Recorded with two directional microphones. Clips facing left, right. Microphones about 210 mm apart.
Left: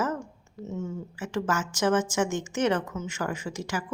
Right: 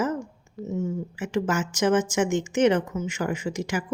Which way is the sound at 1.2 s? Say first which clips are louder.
Right 3 dB; 15° right (ahead or behind).